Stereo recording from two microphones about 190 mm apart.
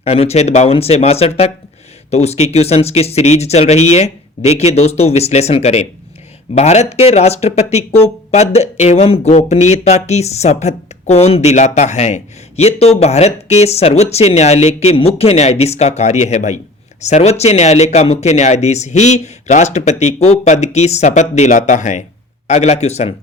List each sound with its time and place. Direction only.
0.0 s speech: 35° left (ahead or behind)